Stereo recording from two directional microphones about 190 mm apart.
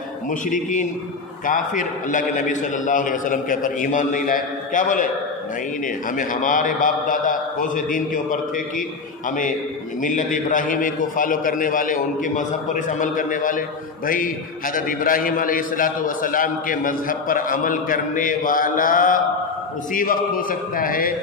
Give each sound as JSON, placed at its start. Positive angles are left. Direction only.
{"t": 0.3, "sound": "a man's voice", "side_deg": 45}
{"t": 6.1, "sound": "a man's voice", "side_deg": 45}
{"t": 10.0, "sound": "a man's voice", "side_deg": 45}